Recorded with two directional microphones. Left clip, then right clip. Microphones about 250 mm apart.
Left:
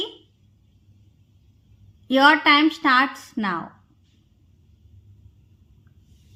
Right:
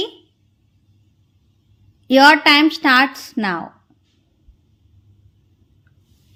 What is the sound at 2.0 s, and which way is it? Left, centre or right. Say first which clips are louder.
A woman's voice: right 5 dB; right.